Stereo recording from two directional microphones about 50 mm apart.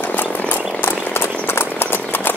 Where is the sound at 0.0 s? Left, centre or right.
Left.